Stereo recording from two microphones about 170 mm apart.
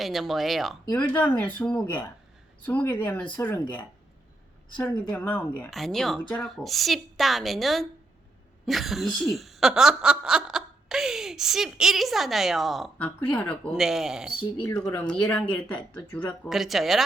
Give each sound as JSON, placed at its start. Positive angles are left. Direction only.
{"t": 0.0, "sound": "speech", "side_deg": 0}
{"t": 1.1, "sound": "speech", "side_deg": 10}
{"t": 5.1, "sound": "speech", "side_deg": 5}
{"t": 13.0, "sound": "speech", "side_deg": 10}
{"t": 14.6, "sound": "speech", "side_deg": 10}